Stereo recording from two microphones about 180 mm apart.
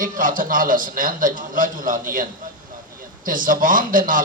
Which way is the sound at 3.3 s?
50° right (ahead or behind).